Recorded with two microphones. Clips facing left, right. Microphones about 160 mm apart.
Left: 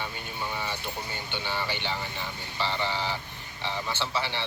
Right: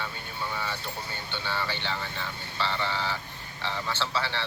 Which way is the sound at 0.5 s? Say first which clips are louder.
Even; 20° left (ahead or behind).